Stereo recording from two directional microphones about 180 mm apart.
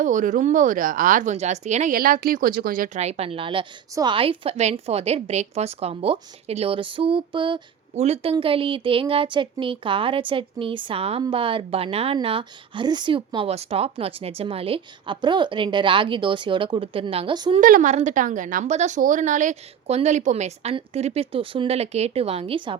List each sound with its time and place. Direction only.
0.0 s a woman's voice: 45° right (ahead or behind); by 17.6 s 25° right (ahead or behind)
17.6 s a woman's voice: 50° right (ahead or behind); by 22.8 s 30° right (ahead or behind)